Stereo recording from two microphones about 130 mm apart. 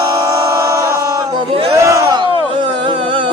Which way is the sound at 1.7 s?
25° right (ahead or behind).